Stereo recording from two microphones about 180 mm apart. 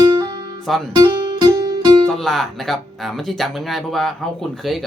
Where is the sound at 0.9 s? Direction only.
25° right (ahead or behind).